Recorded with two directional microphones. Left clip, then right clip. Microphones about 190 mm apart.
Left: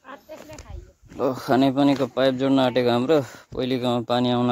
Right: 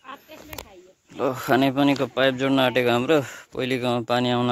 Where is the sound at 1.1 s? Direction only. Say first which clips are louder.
Even; centre (ahead or behind).